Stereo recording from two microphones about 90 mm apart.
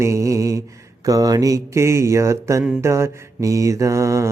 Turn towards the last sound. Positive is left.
turn(degrees=-35)  # may be behind; listen again after turning